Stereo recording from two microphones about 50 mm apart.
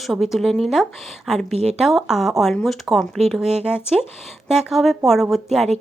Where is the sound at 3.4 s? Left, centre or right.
Centre.